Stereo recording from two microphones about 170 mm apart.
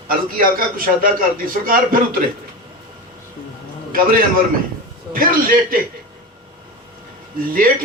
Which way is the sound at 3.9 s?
55° right (ahead or behind).